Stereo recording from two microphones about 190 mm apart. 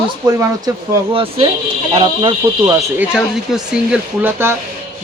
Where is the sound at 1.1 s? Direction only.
30° right (ahead or behind).